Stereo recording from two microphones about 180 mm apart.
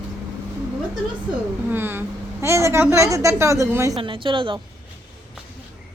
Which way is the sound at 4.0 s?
30° right (ahead or behind).